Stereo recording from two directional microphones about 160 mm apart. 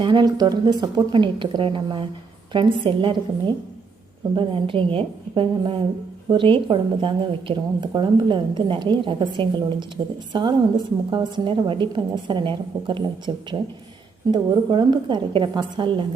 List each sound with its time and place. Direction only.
0.0 s a woman's voice: 30° right (ahead or behind)